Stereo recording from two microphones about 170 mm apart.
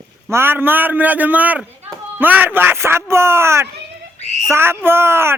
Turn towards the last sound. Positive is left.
turn(degrees=-15)  # may be behind; listen again after turning